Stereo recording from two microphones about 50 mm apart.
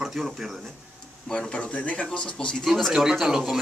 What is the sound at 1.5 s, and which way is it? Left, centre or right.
Speech, left.